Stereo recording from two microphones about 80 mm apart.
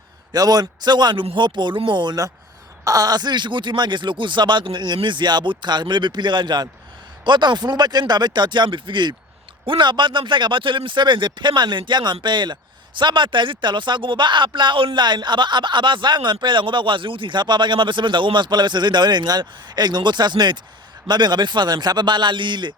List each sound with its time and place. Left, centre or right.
0.3 s speech: right
2.8 s speech: right